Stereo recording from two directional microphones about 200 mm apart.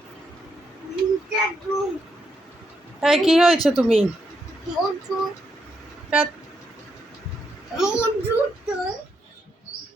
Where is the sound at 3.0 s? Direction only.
5° right (ahead or behind).